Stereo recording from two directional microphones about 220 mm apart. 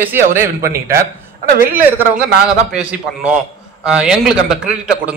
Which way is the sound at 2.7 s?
5° right (ahead or behind).